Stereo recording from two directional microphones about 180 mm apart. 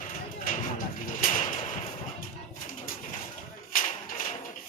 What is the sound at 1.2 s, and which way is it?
Sliding door, 45° left (ahead or behind).